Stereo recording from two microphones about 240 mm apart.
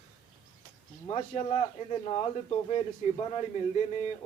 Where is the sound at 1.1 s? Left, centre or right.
Left.